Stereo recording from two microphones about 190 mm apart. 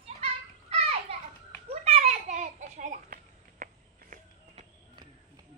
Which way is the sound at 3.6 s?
45° right (ahead or behind).